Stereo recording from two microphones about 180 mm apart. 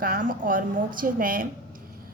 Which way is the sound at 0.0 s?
50° right (ahead or behind).